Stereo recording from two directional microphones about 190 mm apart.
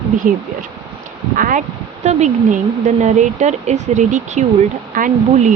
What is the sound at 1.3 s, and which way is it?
Speech, 45° right (ahead or behind).